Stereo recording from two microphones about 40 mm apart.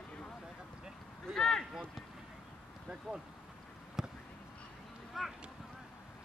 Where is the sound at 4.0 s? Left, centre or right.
Centre.